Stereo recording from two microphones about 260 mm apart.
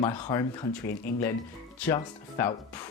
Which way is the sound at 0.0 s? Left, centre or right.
Centre.